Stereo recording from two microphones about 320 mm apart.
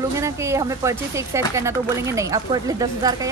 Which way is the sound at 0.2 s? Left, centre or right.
Centre.